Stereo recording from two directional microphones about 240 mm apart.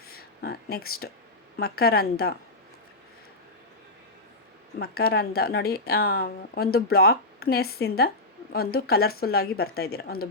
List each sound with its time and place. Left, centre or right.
0.1 s speech: left
4.8 s speech: left